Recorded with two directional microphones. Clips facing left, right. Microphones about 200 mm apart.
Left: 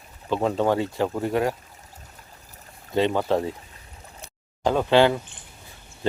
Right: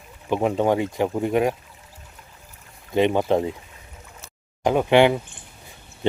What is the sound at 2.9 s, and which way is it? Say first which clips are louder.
Speech: right 3 dB; 20° right (ahead or behind).